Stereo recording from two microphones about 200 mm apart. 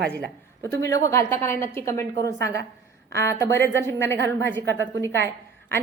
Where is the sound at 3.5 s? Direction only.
60° right (ahead or behind).